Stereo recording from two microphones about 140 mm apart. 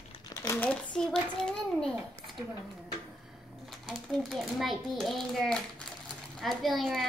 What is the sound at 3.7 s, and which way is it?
A child's voice, centre (ahead or behind).